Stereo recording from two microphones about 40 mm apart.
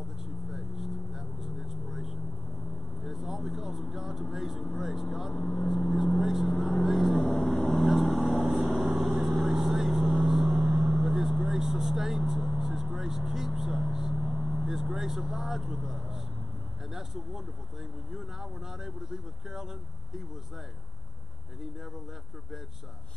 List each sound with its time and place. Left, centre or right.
0.5 s vehicle: centre
4.7 s speech: centre
5.3 s speech: left
5.9 s vehicle: centre
14.8 s speech: centre
15.8 s vehicle: centre
16.9 s speech: centre